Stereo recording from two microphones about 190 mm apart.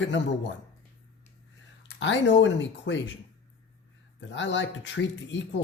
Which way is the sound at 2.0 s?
70° left (ahead or behind).